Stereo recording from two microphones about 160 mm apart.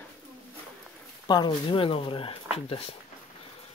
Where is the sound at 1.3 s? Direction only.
30° left (ahead or behind).